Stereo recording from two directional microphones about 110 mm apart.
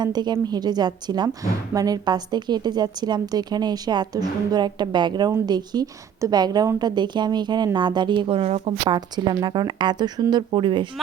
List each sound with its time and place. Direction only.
0.0 s a woman's voice: 40° right (ahead or behind); by 8.9 s 65° right (ahead or behind)
8.9 s speech: 40° right (ahead or behind)